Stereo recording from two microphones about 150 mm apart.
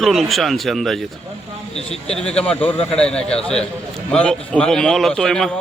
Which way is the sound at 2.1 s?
5° left (ahead or behind).